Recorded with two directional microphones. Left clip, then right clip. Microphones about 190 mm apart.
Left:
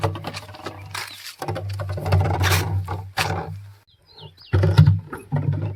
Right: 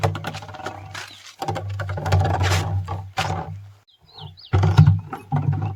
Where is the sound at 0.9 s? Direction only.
50° left (ahead or behind).